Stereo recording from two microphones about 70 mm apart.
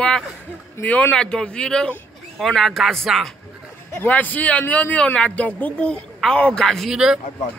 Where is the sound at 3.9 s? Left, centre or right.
Left.